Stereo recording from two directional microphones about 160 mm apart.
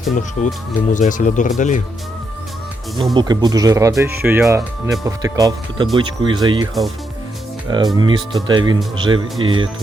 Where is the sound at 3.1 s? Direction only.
25° right (ahead or behind).